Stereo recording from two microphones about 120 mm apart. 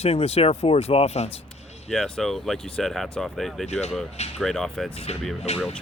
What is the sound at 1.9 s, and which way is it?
Speech, 5° left (ahead or behind).